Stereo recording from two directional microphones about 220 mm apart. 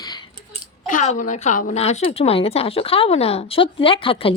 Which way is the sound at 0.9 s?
35° left (ahead or behind).